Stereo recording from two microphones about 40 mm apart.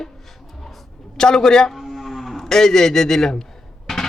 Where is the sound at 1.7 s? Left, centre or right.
Centre.